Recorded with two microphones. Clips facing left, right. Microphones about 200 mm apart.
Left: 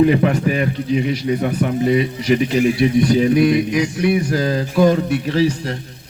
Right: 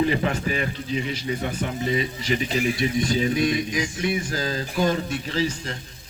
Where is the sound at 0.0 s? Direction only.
60° left (ahead or behind).